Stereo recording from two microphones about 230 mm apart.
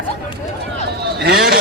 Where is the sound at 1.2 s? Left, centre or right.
Right.